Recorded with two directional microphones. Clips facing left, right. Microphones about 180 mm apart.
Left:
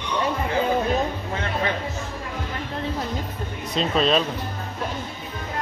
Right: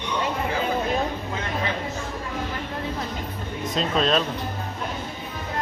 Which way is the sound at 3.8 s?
Centre (ahead or behind).